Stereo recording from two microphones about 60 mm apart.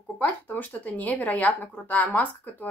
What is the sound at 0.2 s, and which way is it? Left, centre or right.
Speech, left.